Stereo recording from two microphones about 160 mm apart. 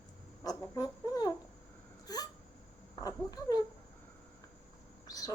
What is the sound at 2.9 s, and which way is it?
Speech, 25° left (ahead or behind).